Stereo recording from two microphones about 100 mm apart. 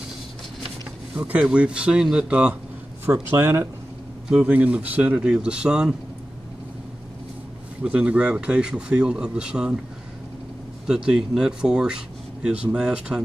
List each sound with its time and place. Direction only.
1.1 s speech: 10° right (ahead or behind)
3.1 s speech: 20° right (ahead or behind)
4.4 s speech: 15° right (ahead or behind)
7.8 s speech: 10° right (ahead or behind)
10.9 s speech: 5° right (ahead or behind)